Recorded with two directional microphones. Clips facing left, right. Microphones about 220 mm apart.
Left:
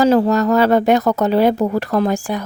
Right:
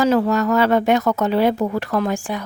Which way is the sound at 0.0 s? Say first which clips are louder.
Left 3 dB; 35° left (ahead or behind).